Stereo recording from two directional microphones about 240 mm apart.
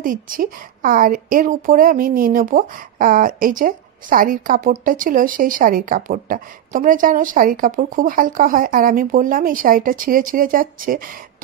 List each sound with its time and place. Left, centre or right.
0.0 s a woman's voice: right